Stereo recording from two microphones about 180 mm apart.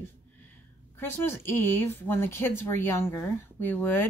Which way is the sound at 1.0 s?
10° left (ahead or behind).